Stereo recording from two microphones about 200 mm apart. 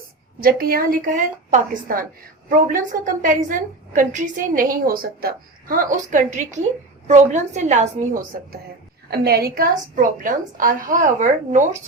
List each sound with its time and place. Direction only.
0.3 s a woman's voice: 45° right (ahead or behind)
9.0 s a woman's voice: 50° right (ahead or behind)